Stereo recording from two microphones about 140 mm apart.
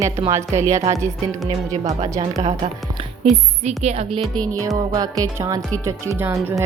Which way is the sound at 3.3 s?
50° right (ahead or behind).